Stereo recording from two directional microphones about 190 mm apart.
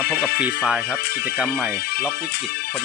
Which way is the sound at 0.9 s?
55° left (ahead or behind).